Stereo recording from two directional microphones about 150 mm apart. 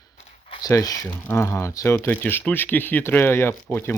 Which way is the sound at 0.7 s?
20° left (ahead or behind).